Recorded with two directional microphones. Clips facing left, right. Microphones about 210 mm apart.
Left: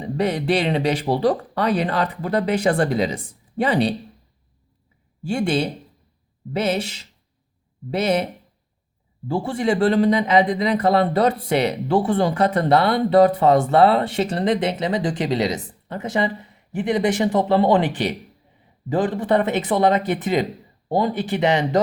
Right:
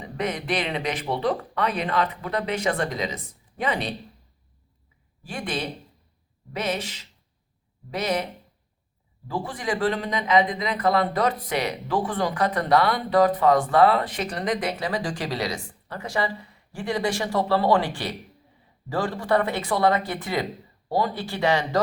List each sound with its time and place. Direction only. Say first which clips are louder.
0.0 s speech: left 7 dB; 30° left (ahead or behind)
5.2 s speech: left 9 dB; 30° left (ahead or behind)